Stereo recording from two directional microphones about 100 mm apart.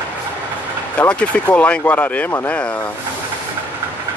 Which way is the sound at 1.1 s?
15° left (ahead or behind).